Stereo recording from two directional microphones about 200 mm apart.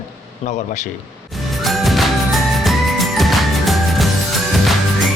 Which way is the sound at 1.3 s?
Centre (ahead or behind).